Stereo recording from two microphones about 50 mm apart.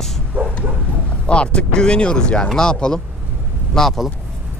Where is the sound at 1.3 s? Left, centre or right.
Left.